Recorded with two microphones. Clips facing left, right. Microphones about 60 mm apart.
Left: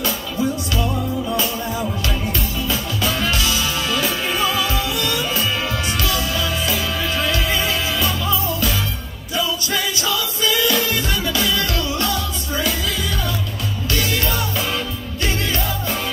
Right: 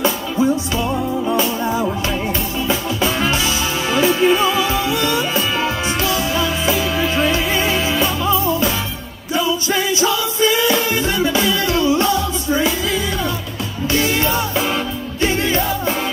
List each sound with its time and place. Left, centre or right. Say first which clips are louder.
0.0 s music: right 5 dB; right
13.9 s music: right 5 dB; right